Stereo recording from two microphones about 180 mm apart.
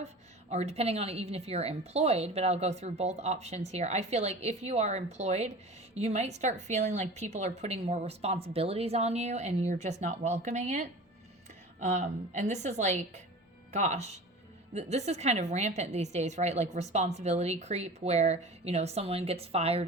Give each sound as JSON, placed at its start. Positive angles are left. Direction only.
{"t": 0.5, "sound": "a woman's voice", "side_deg": -35}